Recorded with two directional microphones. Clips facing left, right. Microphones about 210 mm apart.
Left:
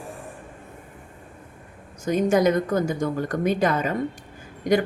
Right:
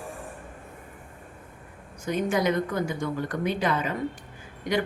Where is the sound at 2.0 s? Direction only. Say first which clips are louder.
Left 5 dB; 45° left (ahead or behind).